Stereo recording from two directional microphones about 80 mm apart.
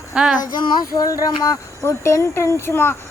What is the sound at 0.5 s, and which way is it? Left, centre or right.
Speech, left.